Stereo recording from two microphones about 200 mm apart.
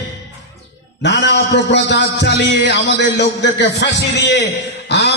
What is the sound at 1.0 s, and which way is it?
A man's voice, 60° left (ahead or behind).